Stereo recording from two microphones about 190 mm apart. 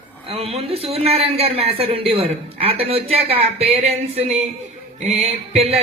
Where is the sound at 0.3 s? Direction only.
30° right (ahead or behind).